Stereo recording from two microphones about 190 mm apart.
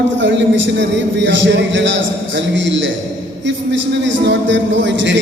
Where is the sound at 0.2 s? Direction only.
75° right (ahead or behind).